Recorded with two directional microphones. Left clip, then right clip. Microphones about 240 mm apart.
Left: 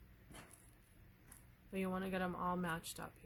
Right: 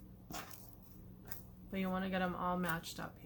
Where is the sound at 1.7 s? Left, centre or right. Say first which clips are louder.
Right 3 dB; left.